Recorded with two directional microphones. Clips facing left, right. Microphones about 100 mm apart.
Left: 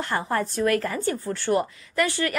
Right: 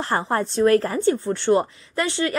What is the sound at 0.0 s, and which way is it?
Speech, 30° right (ahead or behind).